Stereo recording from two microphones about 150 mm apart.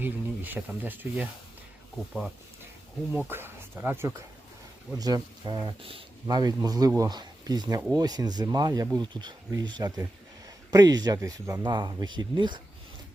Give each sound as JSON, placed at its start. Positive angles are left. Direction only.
{"t": 0.0, "sound": "speech", "side_deg": -10}
{"t": 3.1, "sound": "speech", "side_deg": -15}
{"t": 4.9, "sound": "speech", "side_deg": -25}